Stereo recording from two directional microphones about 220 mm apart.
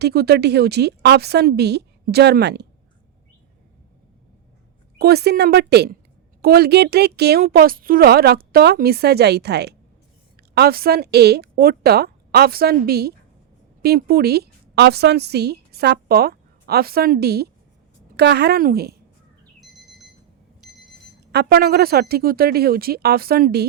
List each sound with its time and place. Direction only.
0.0 s speech: 45° right (ahead or behind)
4.9 s a woman's voice: 45° right (ahead or behind)
21.3 s speech: 45° right (ahead or behind)